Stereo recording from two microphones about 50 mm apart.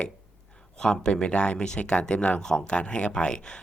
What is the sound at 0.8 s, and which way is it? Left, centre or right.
Speech, centre.